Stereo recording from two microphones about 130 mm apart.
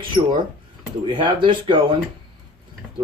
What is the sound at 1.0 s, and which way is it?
Speech, 40° right (ahead or behind).